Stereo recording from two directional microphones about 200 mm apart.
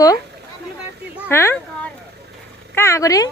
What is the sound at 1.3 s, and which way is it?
Speech, 10° left (ahead or behind).